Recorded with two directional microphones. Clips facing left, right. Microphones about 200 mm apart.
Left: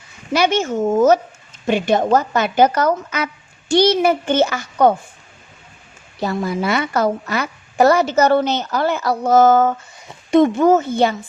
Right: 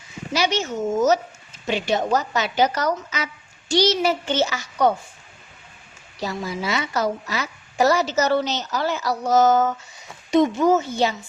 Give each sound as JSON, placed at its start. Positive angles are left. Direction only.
{"t": 0.3, "sound": "a woman's voice", "side_deg": 55}
{"t": 6.1, "sound": "a woman's voice", "side_deg": 55}